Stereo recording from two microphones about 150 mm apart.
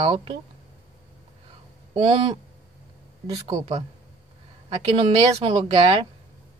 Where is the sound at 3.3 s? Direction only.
25° right (ahead or behind).